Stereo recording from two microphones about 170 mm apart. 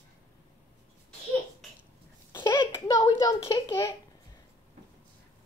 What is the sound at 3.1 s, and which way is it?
Speech, 20° left (ahead or behind).